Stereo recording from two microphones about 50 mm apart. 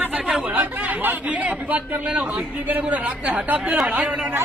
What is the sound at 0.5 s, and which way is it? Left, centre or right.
Speech, right.